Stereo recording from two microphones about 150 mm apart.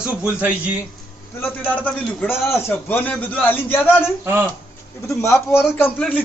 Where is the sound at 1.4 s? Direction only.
10° left (ahead or behind).